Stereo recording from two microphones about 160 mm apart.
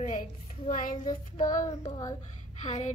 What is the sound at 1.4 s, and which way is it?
Child singing, 50° left (ahead or behind).